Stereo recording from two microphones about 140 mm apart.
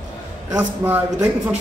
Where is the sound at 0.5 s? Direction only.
15° right (ahead or behind).